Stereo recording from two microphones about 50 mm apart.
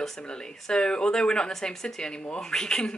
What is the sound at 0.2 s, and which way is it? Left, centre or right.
Speech, centre.